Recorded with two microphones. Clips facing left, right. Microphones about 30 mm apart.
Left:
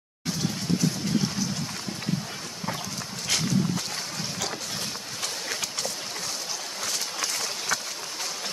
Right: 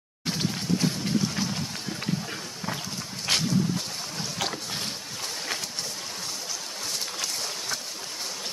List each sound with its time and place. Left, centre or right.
3.3 s dog: right